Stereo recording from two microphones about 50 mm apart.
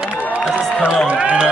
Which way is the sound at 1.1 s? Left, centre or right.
Right.